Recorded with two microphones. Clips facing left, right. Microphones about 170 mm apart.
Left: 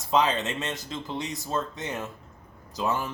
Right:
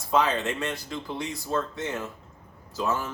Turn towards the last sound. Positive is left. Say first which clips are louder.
# even
turn(degrees=15)  # may be behind; listen again after turning